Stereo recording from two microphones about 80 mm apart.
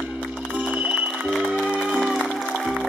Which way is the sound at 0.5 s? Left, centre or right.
Centre.